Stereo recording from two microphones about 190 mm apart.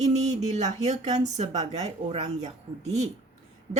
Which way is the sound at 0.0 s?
35° right (ahead or behind).